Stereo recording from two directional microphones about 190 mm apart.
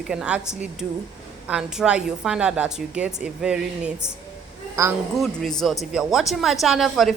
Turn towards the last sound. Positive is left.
turn(degrees=0)  # may be behind; listen again after turning